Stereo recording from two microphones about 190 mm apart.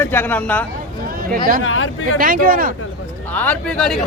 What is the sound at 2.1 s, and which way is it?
Speech, 50° right (ahead or behind).